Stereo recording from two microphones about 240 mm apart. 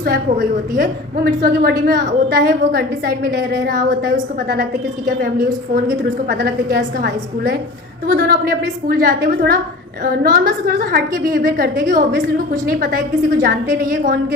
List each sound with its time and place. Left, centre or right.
0.0 s a woman's voice: right